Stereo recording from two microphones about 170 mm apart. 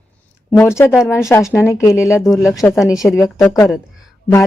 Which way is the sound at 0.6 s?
15° left (ahead or behind).